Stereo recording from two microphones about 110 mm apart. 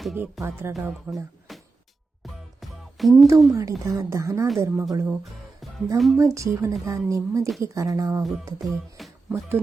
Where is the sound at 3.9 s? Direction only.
25° right (ahead or behind).